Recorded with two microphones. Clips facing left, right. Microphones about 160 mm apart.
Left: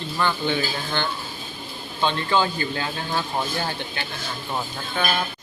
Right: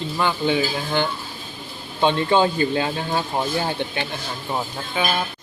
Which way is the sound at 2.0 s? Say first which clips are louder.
Right 4 dB; 20° right (ahead or behind).